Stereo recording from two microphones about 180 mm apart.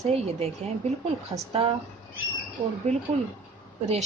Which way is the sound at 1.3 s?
20° right (ahead or behind).